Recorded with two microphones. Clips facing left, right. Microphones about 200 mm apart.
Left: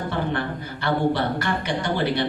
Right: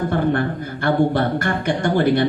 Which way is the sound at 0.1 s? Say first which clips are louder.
Right 6 dB; 50° right (ahead or behind).